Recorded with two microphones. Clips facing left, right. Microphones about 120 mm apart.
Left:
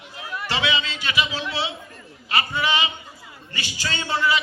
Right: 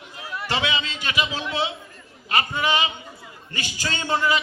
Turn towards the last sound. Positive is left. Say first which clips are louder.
# right 1 dB
turn(degrees=-45)  # may be behind; listen again after turning